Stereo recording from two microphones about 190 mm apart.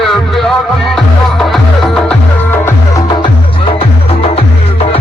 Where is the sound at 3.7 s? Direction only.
30° left (ahead or behind).